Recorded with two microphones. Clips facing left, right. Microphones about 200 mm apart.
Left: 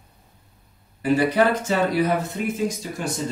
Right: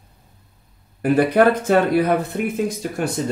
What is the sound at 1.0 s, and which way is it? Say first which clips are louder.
Speech: right 4 dB; 55° right (ahead or behind).